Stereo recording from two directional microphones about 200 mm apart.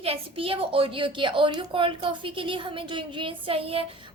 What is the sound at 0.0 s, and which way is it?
A woman's voice, 30° right (ahead or behind).